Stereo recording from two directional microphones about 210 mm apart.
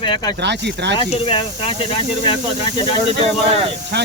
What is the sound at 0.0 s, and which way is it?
Speech, 20° left (ahead or behind).